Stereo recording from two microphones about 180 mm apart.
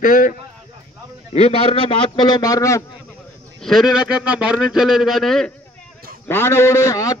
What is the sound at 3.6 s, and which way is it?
Speech, centre (ahead or behind).